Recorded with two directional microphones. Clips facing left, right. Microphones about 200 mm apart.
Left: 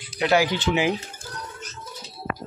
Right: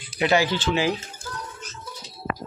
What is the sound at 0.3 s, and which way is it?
Speech, 10° left (ahead or behind).